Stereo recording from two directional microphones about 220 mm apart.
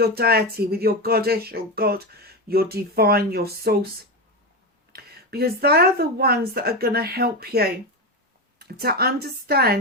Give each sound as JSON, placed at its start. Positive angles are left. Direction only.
{"t": 0.0, "sound": "speech", "side_deg": -45}
{"t": 4.9, "sound": "speech", "side_deg": -45}